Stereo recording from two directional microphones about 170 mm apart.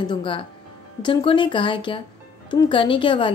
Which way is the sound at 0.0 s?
30° left (ahead or behind).